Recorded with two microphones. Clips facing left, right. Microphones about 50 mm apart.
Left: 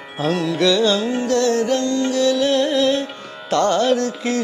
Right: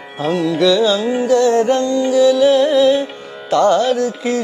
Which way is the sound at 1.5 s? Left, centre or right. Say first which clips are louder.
Right 5 dB; right.